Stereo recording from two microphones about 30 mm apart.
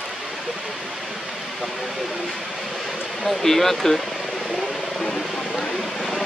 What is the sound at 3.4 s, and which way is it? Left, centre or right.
Speech, centre.